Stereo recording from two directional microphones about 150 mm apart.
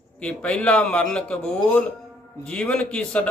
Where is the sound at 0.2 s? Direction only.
5° left (ahead or behind).